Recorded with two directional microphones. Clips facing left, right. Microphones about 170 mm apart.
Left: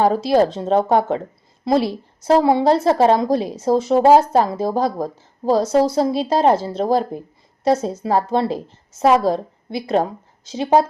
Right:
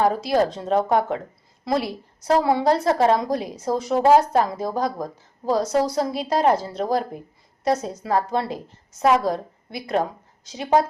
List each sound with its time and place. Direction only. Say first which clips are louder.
0.0 s a woman's voice: left 4 dB; 30° left (ahead or behind)